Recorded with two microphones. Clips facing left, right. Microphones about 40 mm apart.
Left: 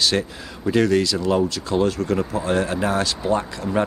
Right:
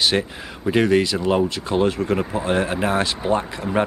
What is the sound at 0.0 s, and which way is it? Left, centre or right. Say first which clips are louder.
Speech: right 1 dB; right.